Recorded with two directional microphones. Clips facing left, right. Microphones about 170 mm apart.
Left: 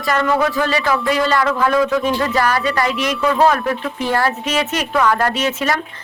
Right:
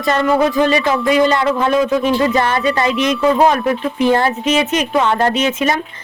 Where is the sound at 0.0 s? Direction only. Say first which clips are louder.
Right 3 dB; 20° right (ahead or behind).